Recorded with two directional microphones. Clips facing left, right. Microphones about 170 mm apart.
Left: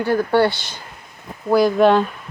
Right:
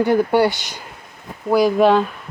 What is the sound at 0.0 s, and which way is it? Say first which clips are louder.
Speech: right 1 dB; 15° right (ahead or behind).